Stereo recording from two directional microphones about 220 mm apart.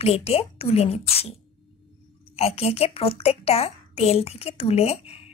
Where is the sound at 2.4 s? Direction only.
25° left (ahead or behind).